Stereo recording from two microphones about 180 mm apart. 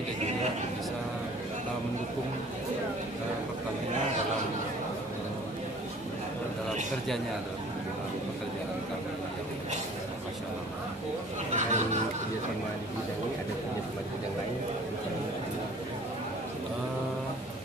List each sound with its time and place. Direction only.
11.5 s music: 40° right (ahead or behind)